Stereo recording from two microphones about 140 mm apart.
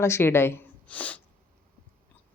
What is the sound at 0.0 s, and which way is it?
Speech, 20° left (ahead or behind).